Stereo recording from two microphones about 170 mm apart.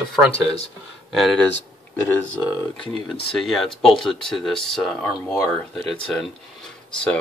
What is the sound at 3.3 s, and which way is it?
Speech, centre (ahead or behind).